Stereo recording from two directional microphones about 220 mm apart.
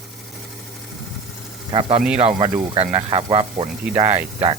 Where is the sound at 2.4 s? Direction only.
20° right (ahead or behind).